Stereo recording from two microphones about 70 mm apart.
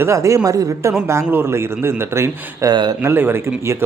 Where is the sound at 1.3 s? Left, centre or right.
Right.